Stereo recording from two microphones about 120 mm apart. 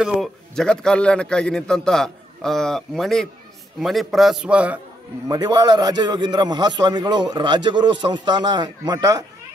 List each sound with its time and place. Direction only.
0.0 s a man's voice: centre (ahead or behind)
5.3 s a man's voice: 35° right (ahead or behind)